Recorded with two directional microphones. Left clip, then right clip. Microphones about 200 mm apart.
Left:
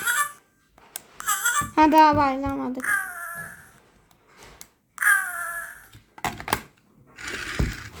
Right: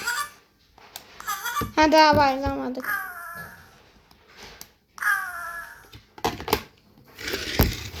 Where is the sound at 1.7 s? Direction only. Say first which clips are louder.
Even; 45° left (ahead or behind).